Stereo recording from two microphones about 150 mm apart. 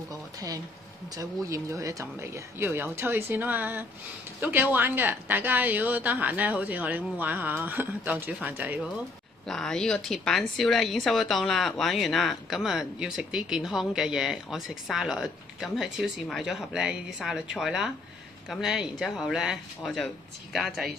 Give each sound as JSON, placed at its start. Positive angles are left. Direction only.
{"t": 1.1, "sound": "a woman's voice", "side_deg": -20}
{"t": 9.5, "sound": "speech", "side_deg": 5}